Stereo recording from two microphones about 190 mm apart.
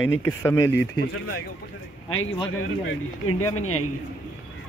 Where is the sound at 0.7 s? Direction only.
55° left (ahead or behind).